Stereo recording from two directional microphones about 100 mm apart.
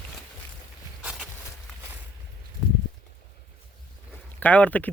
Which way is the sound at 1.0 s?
10° right (ahead or behind).